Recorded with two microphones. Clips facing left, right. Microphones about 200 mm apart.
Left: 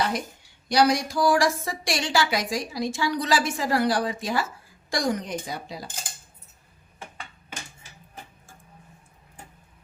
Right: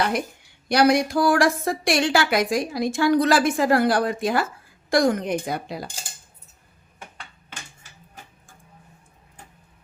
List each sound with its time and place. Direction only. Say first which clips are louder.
0.7 s a woman's voice: right 4 dB; 60° right (ahead or behind)